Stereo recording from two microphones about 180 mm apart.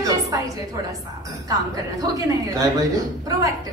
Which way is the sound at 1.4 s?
20° right (ahead or behind).